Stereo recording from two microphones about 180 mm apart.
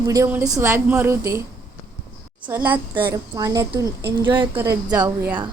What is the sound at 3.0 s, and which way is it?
A woman's voice, 25° right (ahead or behind).